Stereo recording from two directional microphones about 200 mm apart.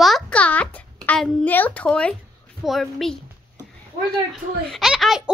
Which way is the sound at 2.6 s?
Centre (ahead or behind).